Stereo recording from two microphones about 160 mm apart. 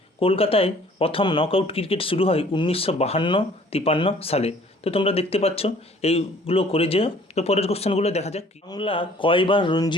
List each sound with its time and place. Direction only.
0.2 s speech: 35° left (ahead or behind)